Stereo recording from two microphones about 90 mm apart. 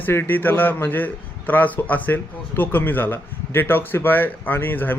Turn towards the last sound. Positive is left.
turn(degrees=20)  # may be behind; listen again after turning